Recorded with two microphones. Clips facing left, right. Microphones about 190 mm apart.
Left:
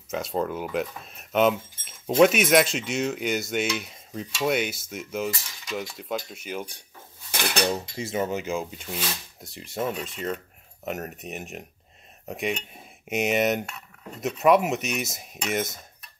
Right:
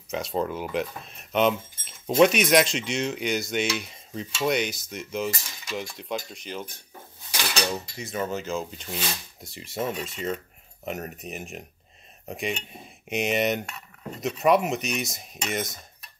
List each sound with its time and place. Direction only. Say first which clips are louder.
0.1 s speech: even; centre (ahead or behind)
7.2 s dishes: left 3 dB; 55° left (ahead or behind)
8.0 s speech: left 2 dB; 20° left (ahead or behind); by 16.1 s 5° left (ahead or behind)